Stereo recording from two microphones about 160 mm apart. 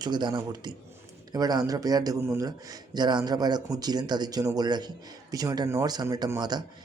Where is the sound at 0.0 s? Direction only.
30° right (ahead or behind).